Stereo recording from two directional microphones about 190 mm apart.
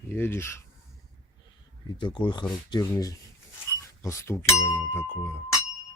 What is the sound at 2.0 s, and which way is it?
Speech, 25° left (ahead or behind).